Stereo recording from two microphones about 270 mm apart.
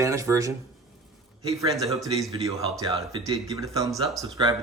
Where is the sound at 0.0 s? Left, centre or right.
Centre.